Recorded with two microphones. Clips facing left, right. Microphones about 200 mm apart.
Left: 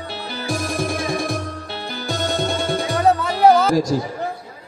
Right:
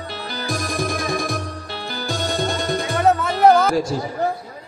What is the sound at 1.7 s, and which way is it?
Music, centre (ahead or behind).